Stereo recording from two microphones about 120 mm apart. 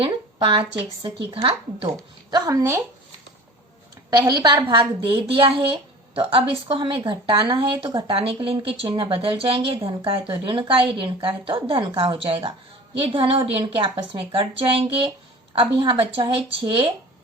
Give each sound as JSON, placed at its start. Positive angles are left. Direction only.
{"t": 0.0, "sound": "speech", "side_deg": -45}
{"t": 2.3, "sound": "speech", "side_deg": -30}
{"t": 4.3, "sound": "a woman's voice", "side_deg": -35}
{"t": 4.7, "sound": "speech", "side_deg": -45}